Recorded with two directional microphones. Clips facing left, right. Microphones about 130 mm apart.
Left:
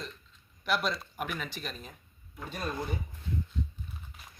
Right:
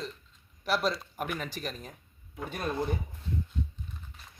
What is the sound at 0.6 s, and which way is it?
Speech, 35° right (ahead or behind).